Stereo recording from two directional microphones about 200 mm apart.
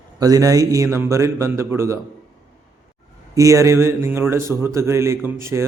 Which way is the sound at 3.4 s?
15° right (ahead or behind).